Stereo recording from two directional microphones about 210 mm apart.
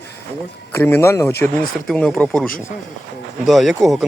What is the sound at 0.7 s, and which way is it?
Speech, 10° left (ahead or behind).